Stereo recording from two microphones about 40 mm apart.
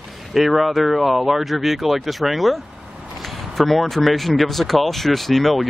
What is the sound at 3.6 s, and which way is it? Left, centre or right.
Speech, centre.